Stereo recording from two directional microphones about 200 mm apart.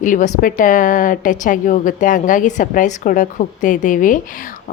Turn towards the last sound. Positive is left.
turn(degrees=40)  # may be behind; listen again after turning